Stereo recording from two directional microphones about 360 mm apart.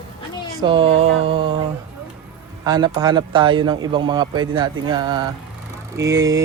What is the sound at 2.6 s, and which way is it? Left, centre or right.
Speech, centre.